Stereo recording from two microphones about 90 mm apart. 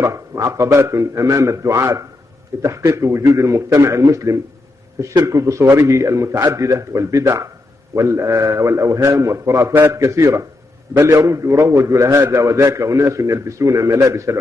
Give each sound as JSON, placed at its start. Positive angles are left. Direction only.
{"t": 0.0, "sound": "a man's voice", "side_deg": -35}